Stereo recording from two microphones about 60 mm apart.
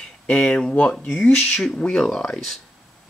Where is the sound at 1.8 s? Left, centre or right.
Centre.